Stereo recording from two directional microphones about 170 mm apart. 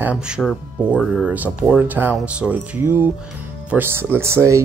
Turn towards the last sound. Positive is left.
turn(degrees=-15)  # may be behind; listen again after turning